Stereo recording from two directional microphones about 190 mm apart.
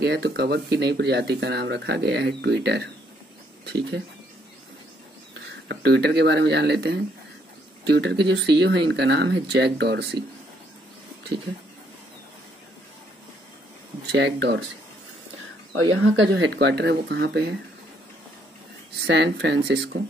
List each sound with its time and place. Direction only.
0.0 s speech: 60° right (ahead or behind)
5.7 s speech: 60° right (ahead or behind)
14.1 s speech: 65° right (ahead or behind)
15.7 s speech: 90° right; by 17.6 s 60° right (ahead or behind)
19.0 s speech: 65° right (ahead or behind)